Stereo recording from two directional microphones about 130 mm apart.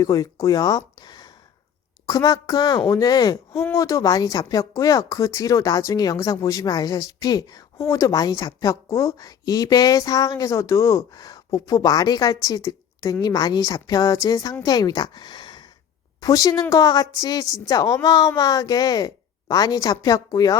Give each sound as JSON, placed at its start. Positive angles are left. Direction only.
{"t": 0.0, "sound": "speech", "side_deg": 25}